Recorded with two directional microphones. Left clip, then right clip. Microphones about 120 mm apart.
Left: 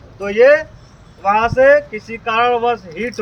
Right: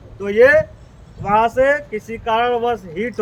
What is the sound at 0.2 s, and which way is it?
Speech, 50° right (ahead or behind).